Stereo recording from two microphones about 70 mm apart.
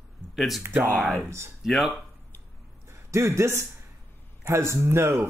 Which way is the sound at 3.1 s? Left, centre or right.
Right.